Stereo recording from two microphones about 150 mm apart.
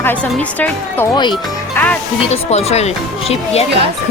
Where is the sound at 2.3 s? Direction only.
45° left (ahead or behind).